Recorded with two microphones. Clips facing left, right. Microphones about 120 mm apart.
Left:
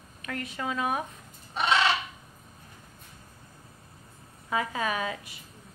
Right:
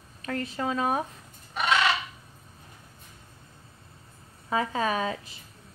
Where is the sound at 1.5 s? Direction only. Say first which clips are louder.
Even; 25° left (ahead or behind).